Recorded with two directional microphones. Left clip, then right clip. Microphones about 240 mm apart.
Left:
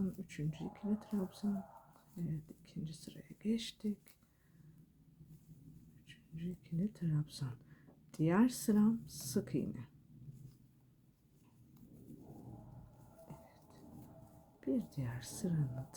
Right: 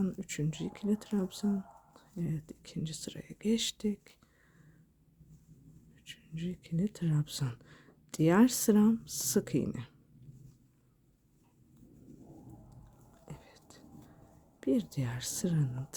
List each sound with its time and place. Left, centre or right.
0.0 s speech: right
6.1 s speech: right
13.2 s whispering: right
14.6 s speech: right